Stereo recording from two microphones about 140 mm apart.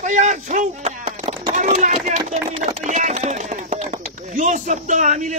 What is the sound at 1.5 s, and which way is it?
A man's voice, 65° right (ahead or behind).